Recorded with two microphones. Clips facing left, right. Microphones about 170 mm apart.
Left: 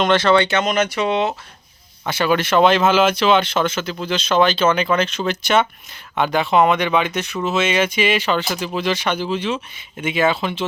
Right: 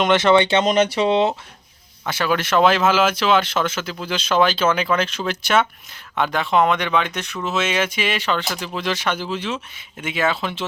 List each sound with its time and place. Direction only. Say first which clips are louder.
0.0 s speech: even; 20° right (ahead or behind)
2.0 s speech: left 3 dB; centre (ahead or behind)